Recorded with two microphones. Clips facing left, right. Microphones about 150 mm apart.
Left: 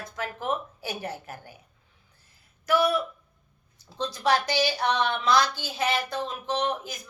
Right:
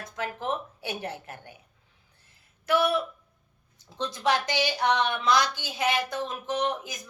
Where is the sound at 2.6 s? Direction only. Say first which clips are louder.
Left 1 dB; 25° right (ahead or behind).